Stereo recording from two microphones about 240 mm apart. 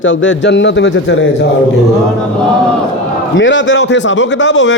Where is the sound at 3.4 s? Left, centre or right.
Left.